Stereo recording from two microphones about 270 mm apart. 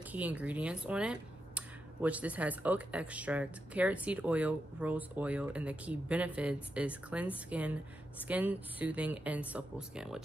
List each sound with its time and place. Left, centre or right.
0.1 s speech: centre